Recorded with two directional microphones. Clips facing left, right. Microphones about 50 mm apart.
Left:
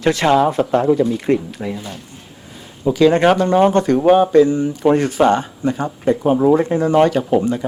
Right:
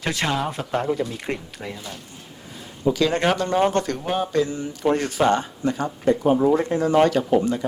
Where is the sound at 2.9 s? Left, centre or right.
Left.